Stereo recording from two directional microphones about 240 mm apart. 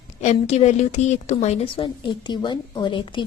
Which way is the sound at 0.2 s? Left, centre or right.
Left.